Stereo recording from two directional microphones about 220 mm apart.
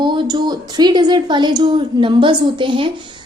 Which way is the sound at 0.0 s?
20° right (ahead or behind).